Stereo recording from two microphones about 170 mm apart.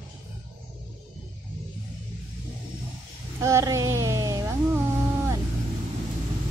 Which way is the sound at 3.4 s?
15° right (ahead or behind).